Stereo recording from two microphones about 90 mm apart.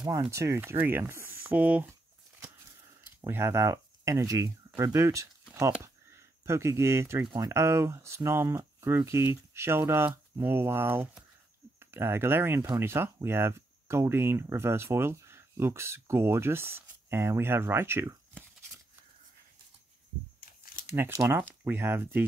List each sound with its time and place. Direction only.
0.1 s speech: 30° right (ahead or behind)
3.2 s speech: 25° right (ahead or behind)
20.9 s speech: 30° right (ahead or behind)